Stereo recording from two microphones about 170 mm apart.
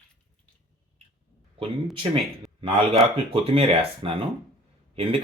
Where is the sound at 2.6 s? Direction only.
35° right (ahead or behind).